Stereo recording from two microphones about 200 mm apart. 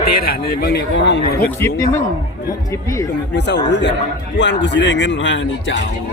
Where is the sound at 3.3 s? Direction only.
60° left (ahead or behind).